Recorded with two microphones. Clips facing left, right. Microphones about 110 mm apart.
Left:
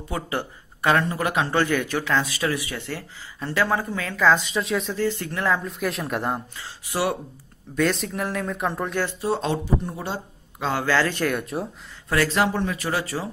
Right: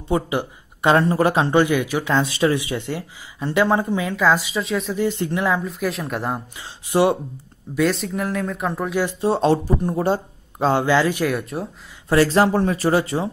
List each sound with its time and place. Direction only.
0.1 s speech: 20° right (ahead or behind)
0.9 s speech: 30° right (ahead or behind)
1.5 s speech: 15° right (ahead or behind)
2.1 s speech: 25° right (ahead or behind); by 4.9 s centre (ahead or behind)
4.9 s speech: 20° right (ahead or behind)
5.6 s speech: centre (ahead or behind)
6.5 s speech: 20° right (ahead or behind)
7.7 s speech: centre (ahead or behind)
9.2 s speech: 35° right (ahead or behind)
10.7 s speech: 20° right (ahead or behind)
11.2 s speech: centre (ahead or behind)
12.1 s speech: 30° right (ahead or behind)